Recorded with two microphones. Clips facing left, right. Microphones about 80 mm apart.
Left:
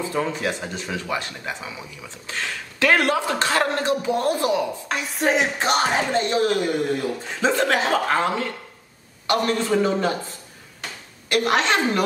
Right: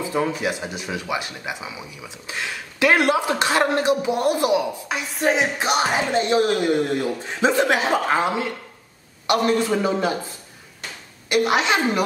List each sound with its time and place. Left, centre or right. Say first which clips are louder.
0.1 s speech: right 4 dB; centre
4.9 s speech: even; centre
11.2 s speech: right 1 dB; centre